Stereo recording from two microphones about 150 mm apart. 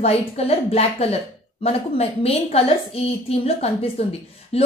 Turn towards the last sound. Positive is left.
turn(degrees=40)  # may be behind; listen again after turning